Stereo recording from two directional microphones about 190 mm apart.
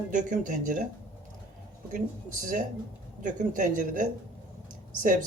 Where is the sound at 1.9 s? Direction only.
45° right (ahead or behind).